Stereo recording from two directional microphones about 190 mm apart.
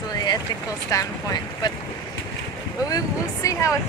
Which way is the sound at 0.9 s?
20° left (ahead or behind).